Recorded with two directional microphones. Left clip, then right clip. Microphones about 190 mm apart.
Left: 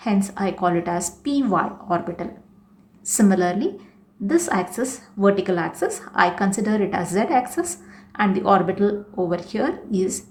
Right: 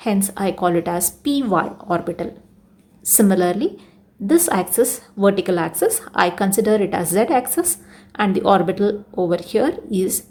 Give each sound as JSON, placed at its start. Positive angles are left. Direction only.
{"t": 0.0, "sound": "a woman's voice", "side_deg": -35}